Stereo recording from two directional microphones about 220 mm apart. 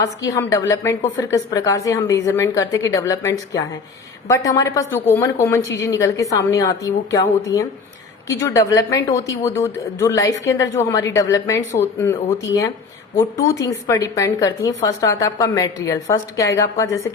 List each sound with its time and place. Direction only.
0.3 s a woman's voice: 15° left (ahead or behind)
13.1 s a woman's voice: 15° left (ahead or behind)